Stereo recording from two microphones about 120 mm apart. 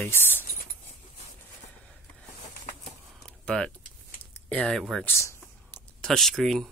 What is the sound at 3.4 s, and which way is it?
Speech, 5° left (ahead or behind).